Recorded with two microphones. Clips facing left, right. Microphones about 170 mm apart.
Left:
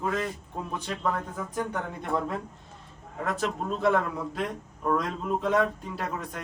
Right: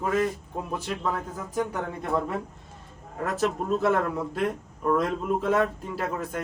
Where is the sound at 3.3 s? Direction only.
Centre (ahead or behind).